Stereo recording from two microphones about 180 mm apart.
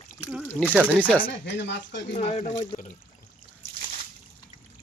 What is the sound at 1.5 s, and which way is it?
Speech, 80° left.